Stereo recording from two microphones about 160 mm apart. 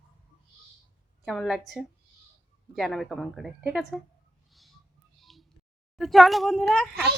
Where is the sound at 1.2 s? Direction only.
Centre (ahead or behind).